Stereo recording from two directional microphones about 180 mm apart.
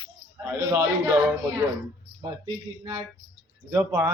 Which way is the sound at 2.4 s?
20° right (ahead or behind).